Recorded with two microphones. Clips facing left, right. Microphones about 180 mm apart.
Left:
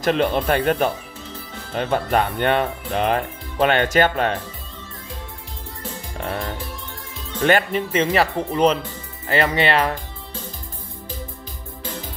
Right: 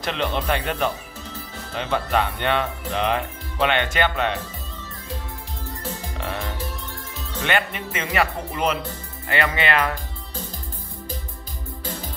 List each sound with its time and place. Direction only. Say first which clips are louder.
0.0 s speech: left 6 dB; 45° left (ahead or behind)
6.1 s music: left 5 dB; 45° left (ahead or behind)
7.3 s speech: left 6 dB; 40° left (ahead or behind)